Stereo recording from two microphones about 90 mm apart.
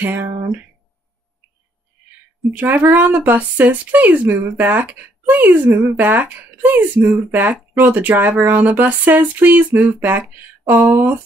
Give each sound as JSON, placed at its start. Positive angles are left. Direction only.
{"t": 0.0, "sound": "speech", "side_deg": -20}
{"t": 2.5, "sound": "speech", "side_deg": -20}